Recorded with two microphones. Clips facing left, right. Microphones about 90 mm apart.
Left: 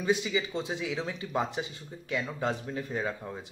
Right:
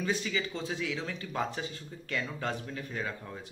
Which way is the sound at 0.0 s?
15° left (ahead or behind).